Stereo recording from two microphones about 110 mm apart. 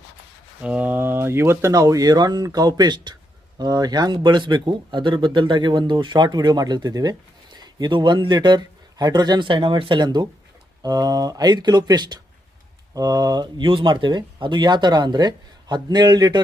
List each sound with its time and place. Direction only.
0.6 s speech: 10° right (ahead or behind); by 16.4 s 40° right (ahead or behind)